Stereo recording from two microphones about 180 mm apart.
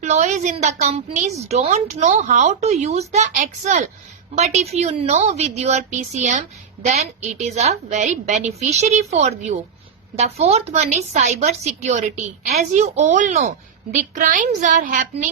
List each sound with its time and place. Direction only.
0.0 s a woman's voice: 40° right (ahead or behind)